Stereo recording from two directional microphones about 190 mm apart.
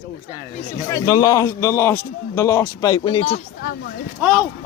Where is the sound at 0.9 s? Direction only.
15° left (ahead or behind); by 3.4 s 30° left (ahead or behind).